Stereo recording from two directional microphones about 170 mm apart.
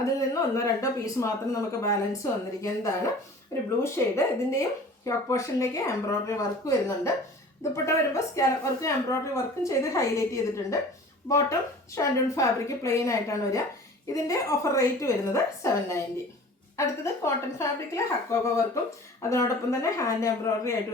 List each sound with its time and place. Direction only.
0.0 s a woman's voice: 20° left (ahead or behind)